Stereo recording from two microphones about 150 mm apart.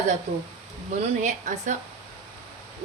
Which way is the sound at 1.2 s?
55° right (ahead or behind).